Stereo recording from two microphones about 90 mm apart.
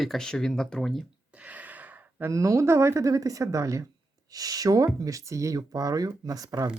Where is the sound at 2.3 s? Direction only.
35° right (ahead or behind).